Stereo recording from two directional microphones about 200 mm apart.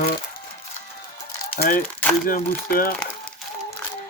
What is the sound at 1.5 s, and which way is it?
Speech, 50° left (ahead or behind).